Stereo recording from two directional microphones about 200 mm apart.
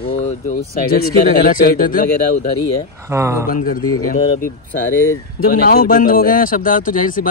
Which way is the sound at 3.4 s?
45° left (ahead or behind).